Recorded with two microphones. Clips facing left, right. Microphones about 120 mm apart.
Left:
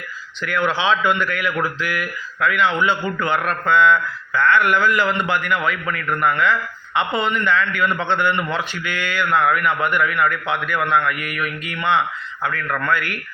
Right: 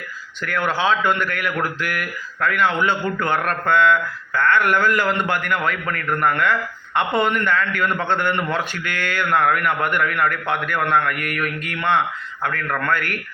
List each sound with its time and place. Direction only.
0.4 s a man's voice: 45° right (ahead or behind)